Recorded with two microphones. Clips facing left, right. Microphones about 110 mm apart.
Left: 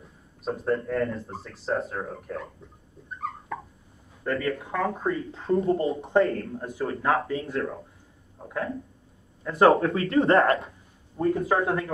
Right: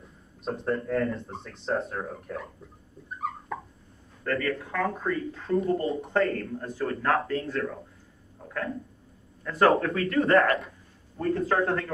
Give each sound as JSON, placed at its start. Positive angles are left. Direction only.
{"t": 0.5, "sound": "speech", "side_deg": 0}
{"t": 4.2, "sound": "speech", "side_deg": 20}
{"t": 8.4, "sound": "a sound", "side_deg": 15}
{"t": 9.4, "sound": "speech", "side_deg": 20}
{"t": 11.1, "sound": "speech", "side_deg": 15}